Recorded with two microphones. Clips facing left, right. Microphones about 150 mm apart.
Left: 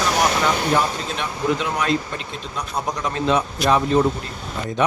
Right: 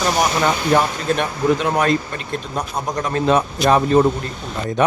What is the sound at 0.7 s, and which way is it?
Speech, 55° right (ahead or behind).